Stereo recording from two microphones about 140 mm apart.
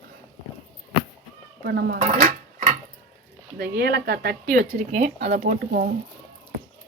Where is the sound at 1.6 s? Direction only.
90° right; by 2.7 s 65° right (ahead or behind).